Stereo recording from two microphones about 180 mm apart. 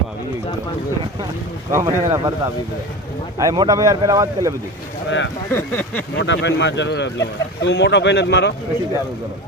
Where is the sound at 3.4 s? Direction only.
20° right (ahead or behind).